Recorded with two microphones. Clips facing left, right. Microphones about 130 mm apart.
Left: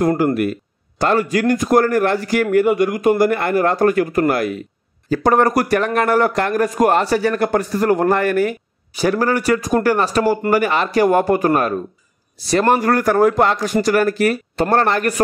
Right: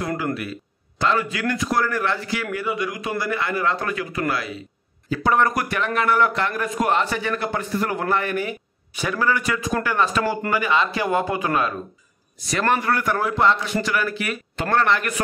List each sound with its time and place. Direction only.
0.2 s a man's voice: 50° left (ahead or behind)
12.4 s a man's voice: 35° left (ahead or behind)